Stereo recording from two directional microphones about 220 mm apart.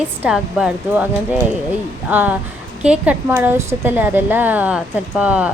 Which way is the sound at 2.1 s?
10° right (ahead or behind).